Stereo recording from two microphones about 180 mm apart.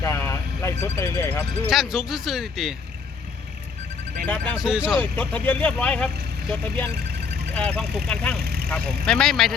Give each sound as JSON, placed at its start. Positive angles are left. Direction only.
{"t": 0.0, "sound": "vehicle", "side_deg": 15}
{"t": 1.6, "sound": "speech", "side_deg": 0}
{"t": 4.5, "sound": "speech", "side_deg": -5}
{"t": 4.9, "sound": "speech", "side_deg": 10}
{"t": 8.4, "sound": "speech", "side_deg": -65}
{"t": 8.7, "sound": "speech", "side_deg": 5}